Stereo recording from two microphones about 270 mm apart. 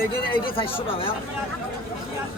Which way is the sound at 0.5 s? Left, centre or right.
Centre.